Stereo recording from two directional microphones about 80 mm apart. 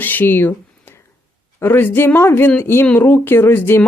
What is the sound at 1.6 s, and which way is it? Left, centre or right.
Speech, left.